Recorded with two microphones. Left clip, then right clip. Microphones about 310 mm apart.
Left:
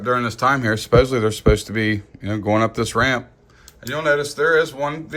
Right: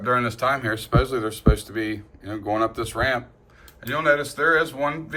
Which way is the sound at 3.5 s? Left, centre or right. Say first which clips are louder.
Even; centre.